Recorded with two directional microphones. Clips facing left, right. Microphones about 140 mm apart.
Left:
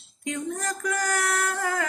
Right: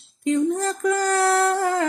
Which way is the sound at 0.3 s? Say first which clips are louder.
Right 9 dB; 30° right (ahead or behind).